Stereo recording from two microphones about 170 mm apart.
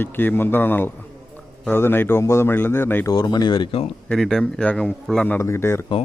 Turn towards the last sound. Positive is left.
turn(degrees=15)  # may be behind; listen again after turning